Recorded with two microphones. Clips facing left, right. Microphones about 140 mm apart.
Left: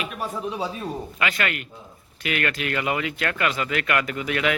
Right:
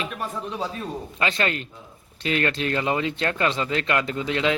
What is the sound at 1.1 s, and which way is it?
Speech, 30° right (ahead or behind).